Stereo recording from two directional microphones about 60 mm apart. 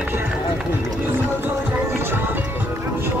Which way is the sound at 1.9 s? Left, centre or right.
Right.